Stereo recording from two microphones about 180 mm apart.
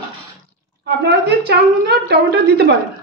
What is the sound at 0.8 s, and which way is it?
A woman's voice, 65° right (ahead or behind).